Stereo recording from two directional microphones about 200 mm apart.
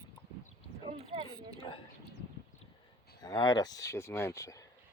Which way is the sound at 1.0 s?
30° right (ahead or behind).